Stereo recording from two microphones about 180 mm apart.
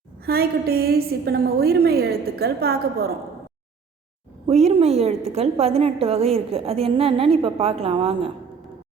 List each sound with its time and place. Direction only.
0.3 s a woman's voice: 60° right (ahead or behind)
4.6 s a woman's voice: 35° right (ahead or behind)